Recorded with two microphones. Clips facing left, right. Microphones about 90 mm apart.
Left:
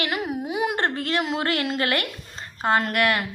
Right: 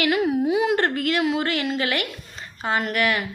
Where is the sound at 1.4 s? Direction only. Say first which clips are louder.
Right 1 dB; 45° left (ahead or behind).